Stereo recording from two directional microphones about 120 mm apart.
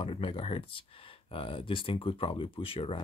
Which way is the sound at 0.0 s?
50° left (ahead or behind).